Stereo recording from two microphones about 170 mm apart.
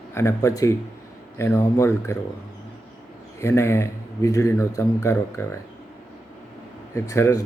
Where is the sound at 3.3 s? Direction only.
15° left (ahead or behind).